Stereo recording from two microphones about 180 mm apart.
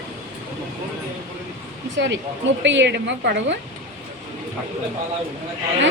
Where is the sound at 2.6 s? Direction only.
80° right.